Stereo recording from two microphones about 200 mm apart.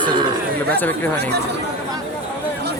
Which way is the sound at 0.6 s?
10° left (ahead or behind).